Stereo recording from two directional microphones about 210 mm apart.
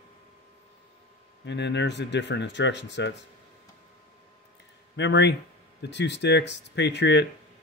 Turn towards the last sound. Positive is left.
turn(degrees=55)  # may be behind; listen again after turning